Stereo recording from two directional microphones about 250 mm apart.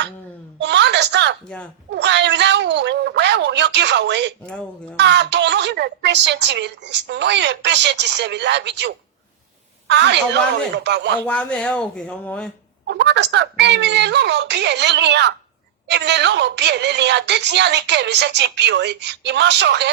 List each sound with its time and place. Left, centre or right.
0.6 s a sound: right
2.0 s a woman's voice: right
11.2 s speech: centre
12.9 s a woman's voice: right